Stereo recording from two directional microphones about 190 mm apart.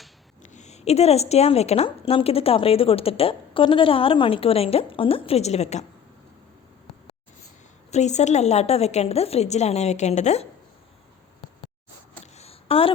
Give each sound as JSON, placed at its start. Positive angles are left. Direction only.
{"t": 0.5, "sound": "a woman's voice", "side_deg": 35}
{"t": 7.9, "sound": "a woman's voice", "side_deg": 35}
{"t": 12.2, "sound": "a sound", "side_deg": 35}